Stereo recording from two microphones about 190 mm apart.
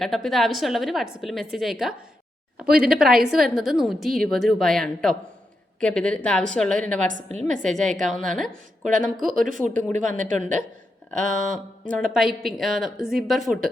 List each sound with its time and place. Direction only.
0.0 s a woman's voice: centre (ahead or behind)
7.3 s a woman's voice: 40° right (ahead or behind)
7.9 s a woman's voice: centre (ahead or behind)
8.8 s a woman's voice: 45° right (ahead or behind)
12.1 s a woman's voice: centre (ahead or behind)